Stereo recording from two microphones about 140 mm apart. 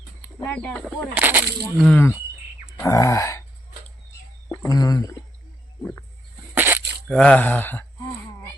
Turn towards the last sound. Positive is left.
turn(degrees=15)  # may be behind; listen again after turning